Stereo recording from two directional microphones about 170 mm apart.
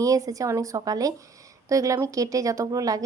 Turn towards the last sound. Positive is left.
turn(degrees=-20)  # may be behind; listen again after turning